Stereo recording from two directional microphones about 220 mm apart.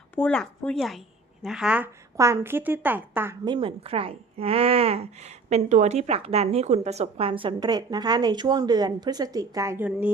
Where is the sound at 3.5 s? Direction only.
25° right (ahead or behind).